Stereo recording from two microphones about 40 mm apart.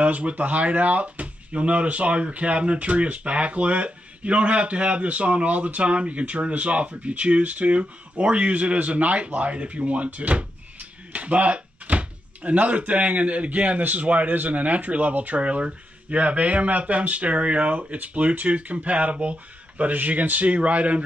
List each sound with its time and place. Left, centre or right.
0.0 s speech: right